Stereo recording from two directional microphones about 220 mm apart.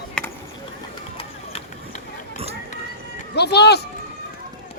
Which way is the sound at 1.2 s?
30° left (ahead or behind).